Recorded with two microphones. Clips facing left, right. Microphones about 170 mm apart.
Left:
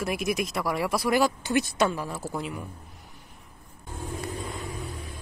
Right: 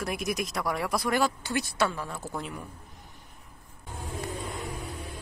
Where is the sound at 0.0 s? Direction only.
Centre (ahead or behind).